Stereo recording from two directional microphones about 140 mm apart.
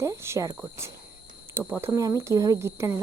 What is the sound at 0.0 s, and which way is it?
Speech, 20° right (ahead or behind).